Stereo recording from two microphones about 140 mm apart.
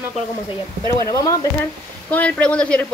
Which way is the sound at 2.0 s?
10° left (ahead or behind).